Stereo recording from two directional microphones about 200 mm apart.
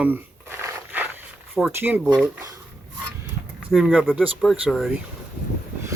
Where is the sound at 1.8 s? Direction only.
10° right (ahead or behind).